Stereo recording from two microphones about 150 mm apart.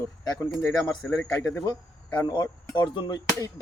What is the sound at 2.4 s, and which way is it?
Speech, 25° left (ahead or behind).